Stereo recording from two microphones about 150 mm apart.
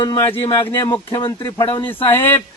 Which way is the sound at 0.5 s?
20° left (ahead or behind).